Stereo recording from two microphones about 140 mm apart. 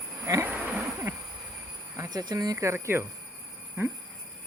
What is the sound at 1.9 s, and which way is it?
Speech, 25° right (ahead or behind).